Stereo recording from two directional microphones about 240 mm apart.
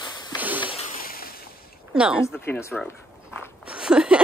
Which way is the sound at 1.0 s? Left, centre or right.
Left.